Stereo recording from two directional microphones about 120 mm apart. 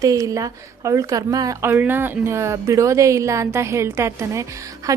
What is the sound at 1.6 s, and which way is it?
A woman's voice, 20° right (ahead or behind).